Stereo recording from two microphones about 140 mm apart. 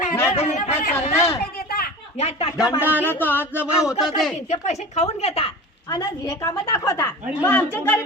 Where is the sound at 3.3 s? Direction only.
15° right (ahead or behind).